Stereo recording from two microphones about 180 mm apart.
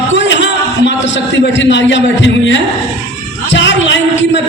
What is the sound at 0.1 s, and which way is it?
Music, 90° left.